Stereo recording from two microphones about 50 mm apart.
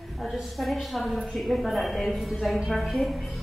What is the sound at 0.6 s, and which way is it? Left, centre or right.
A woman's voice, centre.